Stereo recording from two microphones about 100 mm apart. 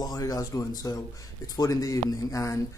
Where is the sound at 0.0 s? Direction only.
35° left (ahead or behind).